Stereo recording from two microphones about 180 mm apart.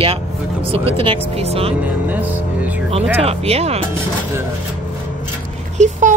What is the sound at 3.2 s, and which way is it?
Speech, 35° right (ahead or behind).